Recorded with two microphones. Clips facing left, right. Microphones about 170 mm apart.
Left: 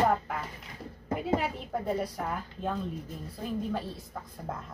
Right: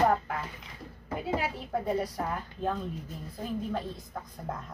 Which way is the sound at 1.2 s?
Centre (ahead or behind).